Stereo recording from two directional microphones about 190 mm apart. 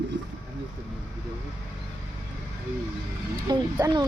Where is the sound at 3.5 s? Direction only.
20° right (ahead or behind).